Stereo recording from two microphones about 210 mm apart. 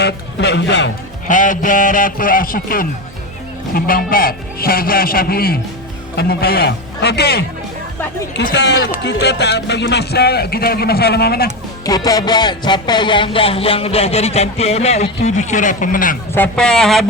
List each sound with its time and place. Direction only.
0.0 s speech: 55° left (ahead or behind)
1.3 s a man's voice: 40° left (ahead or behind)
8.4 s a man's voice: 55° left (ahead or behind)
11.9 s speech: 15° left (ahead or behind); by 16.1 s 40° left (ahead or behind)
16.3 s speech: 5° left (ahead or behind)